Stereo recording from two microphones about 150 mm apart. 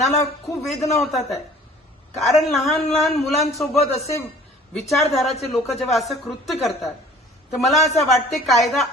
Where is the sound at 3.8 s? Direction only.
45° left (ahead or behind).